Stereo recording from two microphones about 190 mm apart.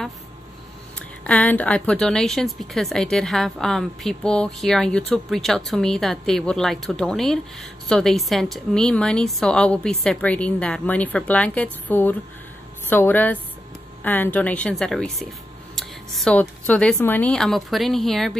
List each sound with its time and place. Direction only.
0.9 s a woman's voice: 5° left (ahead or behind)